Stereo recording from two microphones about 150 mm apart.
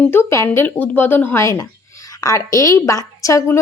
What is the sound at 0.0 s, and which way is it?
Speech, 15° left (ahead or behind).